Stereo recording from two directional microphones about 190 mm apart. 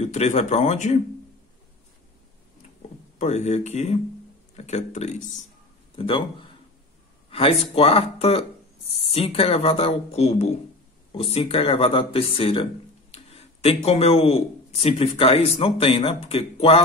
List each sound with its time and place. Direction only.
0.0 s speech: 40° left (ahead or behind)
3.2 s speech: 35° left (ahead or behind)
7.2 s a sound: 30° left (ahead or behind)
7.7 s speech: 30° left (ahead or behind)